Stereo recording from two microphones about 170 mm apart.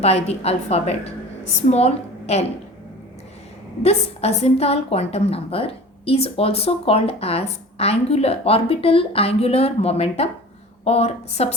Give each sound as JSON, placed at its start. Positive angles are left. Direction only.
{"t": 0.0, "sound": "a woman's voice", "side_deg": 35}
{"t": 3.8, "sound": "a woman's voice", "side_deg": 40}